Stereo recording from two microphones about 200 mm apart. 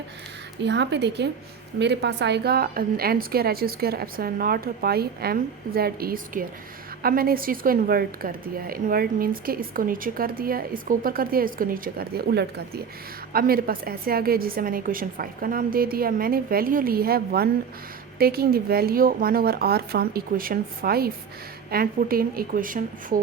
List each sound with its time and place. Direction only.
0.6 s a woman's voice: 60° right (ahead or behind); by 23.1 s 45° right (ahead or behind)